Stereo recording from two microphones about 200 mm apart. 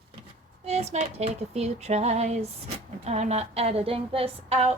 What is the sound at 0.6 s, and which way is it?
Speech, 30° right (ahead or behind).